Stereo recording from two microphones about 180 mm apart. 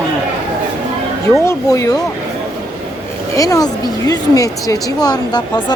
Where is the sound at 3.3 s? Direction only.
20° left (ahead or behind).